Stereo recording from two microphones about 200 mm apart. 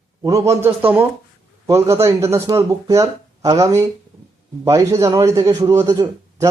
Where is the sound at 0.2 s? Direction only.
15° right (ahead or behind).